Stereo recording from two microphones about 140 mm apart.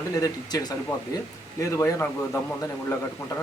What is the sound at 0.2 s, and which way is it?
A man's voice, 30° left (ahead or behind).